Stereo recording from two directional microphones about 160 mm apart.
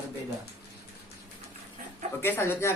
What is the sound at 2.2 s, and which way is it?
Speech, 15° left (ahead or behind).